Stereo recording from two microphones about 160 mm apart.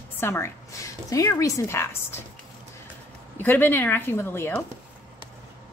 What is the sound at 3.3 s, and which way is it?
A woman's voice, 10° left (ahead or behind).